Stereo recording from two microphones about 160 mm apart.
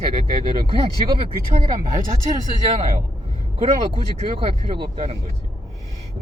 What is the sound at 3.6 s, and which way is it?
Speech, 35° right (ahead or behind).